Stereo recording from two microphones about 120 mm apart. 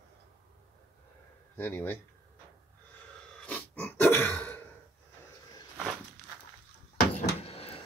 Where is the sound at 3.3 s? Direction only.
10° left (ahead or behind).